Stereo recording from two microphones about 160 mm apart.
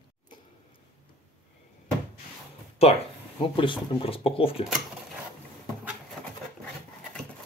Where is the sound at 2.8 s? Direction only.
40° left (ahead or behind).